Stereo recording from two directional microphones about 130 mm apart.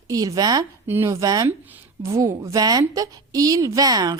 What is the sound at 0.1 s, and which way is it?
A woman's voice, 25° right (ahead or behind).